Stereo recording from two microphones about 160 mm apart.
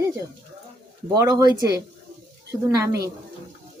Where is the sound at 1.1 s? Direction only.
20° right (ahead or behind).